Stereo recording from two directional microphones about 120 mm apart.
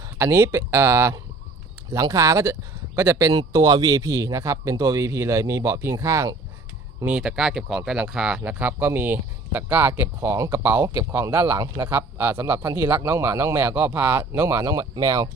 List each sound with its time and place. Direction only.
0.2 s a man's voice: 20° right (ahead or behind)
3.3 s a man's voice: 30° right (ahead or behind)
7.0 s a man's voice: 10° right (ahead or behind); by 15.3 s 25° right (ahead or behind)